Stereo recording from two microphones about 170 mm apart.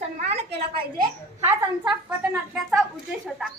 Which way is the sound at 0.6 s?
25° right (ahead or behind).